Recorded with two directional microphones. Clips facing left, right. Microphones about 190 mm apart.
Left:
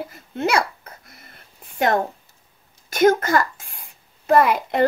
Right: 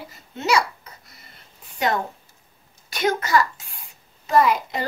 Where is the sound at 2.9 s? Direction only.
45° left (ahead or behind).